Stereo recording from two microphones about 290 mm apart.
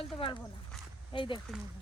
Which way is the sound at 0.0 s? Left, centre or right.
Centre.